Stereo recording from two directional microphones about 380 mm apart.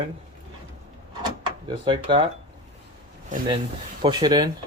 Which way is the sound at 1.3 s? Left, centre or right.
Centre.